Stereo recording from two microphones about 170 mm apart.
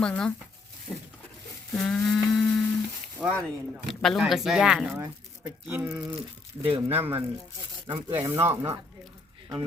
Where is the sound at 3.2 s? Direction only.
Centre (ahead or behind).